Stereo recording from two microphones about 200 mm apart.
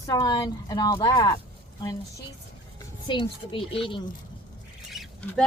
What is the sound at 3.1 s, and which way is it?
Speech, 25° left (ahead or behind).